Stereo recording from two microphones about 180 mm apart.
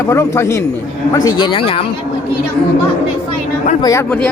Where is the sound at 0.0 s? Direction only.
15° left (ahead or behind); by 1.9 s 30° left (ahead or behind).